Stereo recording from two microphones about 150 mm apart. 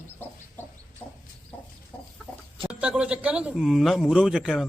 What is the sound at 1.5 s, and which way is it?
Chicken, 10° left (ahead or behind).